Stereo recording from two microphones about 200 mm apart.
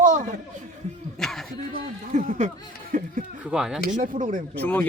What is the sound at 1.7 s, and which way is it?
Speech, 40° right (ahead or behind).